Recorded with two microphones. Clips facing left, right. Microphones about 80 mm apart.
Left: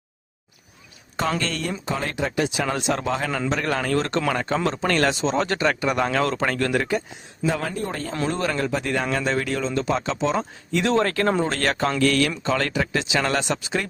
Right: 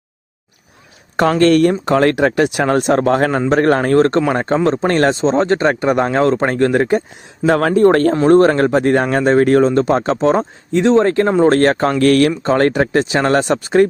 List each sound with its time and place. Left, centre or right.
1.4 s speech: right
7.4 s speech: right
8.3 s speech: right
11.4 s speech: right